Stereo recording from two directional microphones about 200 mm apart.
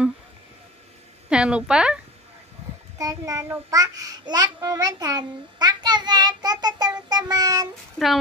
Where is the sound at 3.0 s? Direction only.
15° right (ahead or behind).